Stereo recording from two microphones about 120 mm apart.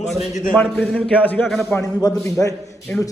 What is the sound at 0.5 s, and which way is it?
Speech, 10° left (ahead or behind).